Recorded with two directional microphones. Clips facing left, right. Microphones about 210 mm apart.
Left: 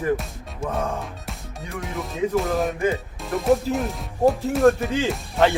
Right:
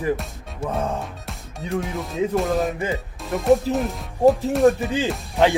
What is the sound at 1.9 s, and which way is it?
Speech, centre (ahead or behind).